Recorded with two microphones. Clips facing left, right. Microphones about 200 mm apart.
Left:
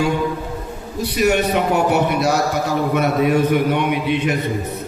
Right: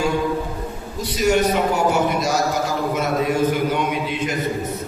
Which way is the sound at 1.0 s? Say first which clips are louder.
Left 1 dB; 60° left (ahead or behind).